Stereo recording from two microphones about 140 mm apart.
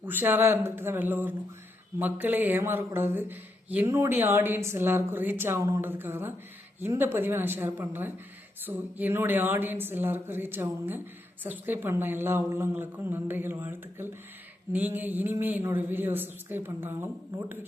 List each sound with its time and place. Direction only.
0.0 s speech: 15° right (ahead or behind)